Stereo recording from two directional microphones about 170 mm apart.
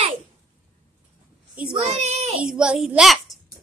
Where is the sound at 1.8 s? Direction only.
40° right (ahead or behind).